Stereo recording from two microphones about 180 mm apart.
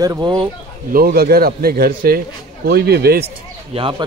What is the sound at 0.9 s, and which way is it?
A man's voice, 55° right (ahead or behind).